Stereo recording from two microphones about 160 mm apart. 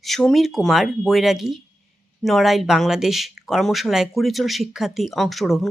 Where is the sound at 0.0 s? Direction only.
Centre (ahead or behind).